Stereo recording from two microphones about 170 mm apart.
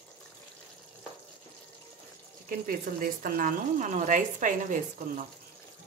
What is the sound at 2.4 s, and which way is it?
A woman's voice, 55° right (ahead or behind).